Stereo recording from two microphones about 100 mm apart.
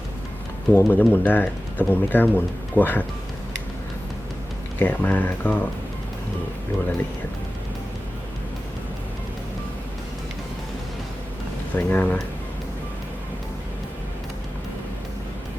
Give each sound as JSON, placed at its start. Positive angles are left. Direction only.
{"t": 0.7, "sound": "speech", "side_deg": 20}
{"t": 4.8, "sound": "speech", "side_deg": 15}
{"t": 11.8, "sound": "speech", "side_deg": 15}